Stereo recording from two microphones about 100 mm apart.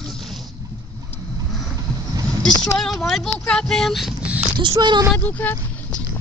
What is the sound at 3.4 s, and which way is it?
Speech, 10° left (ahead or behind).